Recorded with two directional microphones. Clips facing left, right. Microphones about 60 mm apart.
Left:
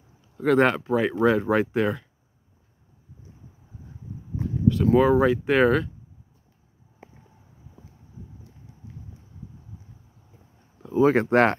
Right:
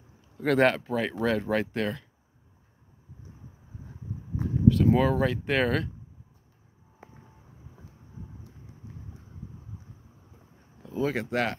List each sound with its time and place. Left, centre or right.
0.4 s speech: centre
4.9 s speech: centre
10.9 s speech: left